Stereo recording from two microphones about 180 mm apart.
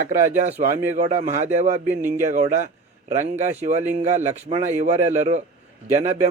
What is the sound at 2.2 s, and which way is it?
A man's voice, 40° right (ahead or behind).